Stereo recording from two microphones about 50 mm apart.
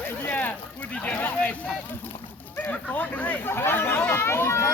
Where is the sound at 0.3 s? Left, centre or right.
Left.